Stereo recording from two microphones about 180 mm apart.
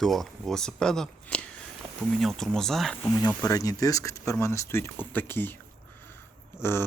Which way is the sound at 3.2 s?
20° left (ahead or behind).